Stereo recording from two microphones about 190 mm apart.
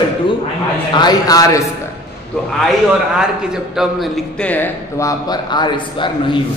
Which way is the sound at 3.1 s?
5° right (ahead or behind).